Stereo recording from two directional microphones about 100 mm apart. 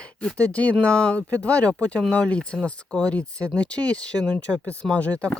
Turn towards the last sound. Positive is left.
turn(degrees=10)  # may be behind; listen again after turning